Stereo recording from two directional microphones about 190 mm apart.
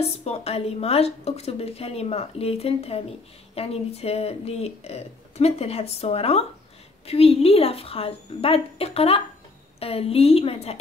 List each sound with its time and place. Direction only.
0.0 s a woman's voice: 35° left (ahead or behind)